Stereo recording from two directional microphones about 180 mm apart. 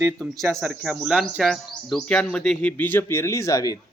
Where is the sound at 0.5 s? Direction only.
5° right (ahead or behind); by 3.8 s 20° left (ahead or behind).